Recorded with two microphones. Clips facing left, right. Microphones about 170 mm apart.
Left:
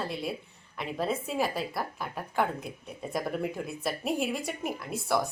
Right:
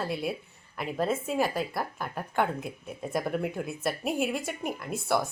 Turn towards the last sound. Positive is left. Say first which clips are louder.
# right 1 dB
turn(degrees=0)  # may be behind; listen again after turning